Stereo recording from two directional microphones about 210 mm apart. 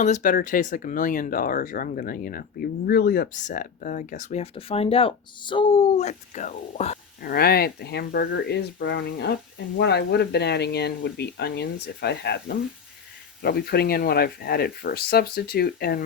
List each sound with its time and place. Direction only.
0.0 s speech: 35° left (ahead or behind); by 12.4 s 50° left (ahead or behind)
13.4 s speech: 50° left (ahead or behind)